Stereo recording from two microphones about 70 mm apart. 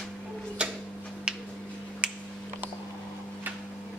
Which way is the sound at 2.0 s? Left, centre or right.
Centre.